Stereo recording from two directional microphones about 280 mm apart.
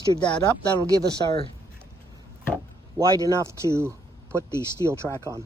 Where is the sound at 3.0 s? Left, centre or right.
Centre.